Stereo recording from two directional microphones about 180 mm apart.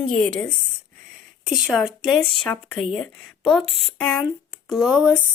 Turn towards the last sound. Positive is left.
turn(degrees=-5)  # may be behind; listen again after turning